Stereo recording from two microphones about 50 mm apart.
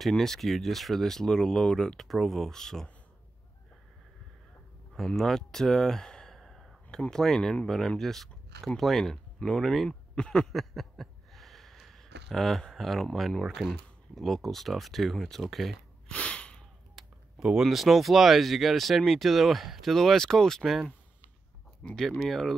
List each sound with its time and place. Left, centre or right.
0.1 s speech: centre
4.9 s sigh: centre
7.1 s speech: centre
9.8 s speech: centre
10.5 s a sound: centre
13.7 s speech: centre
16.1 s a sound: left
16.9 s speech: centre
21.8 s speech: centre